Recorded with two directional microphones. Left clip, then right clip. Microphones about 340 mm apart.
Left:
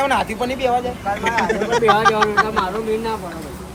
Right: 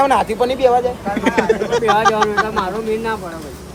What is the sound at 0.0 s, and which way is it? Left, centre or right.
Speech, right.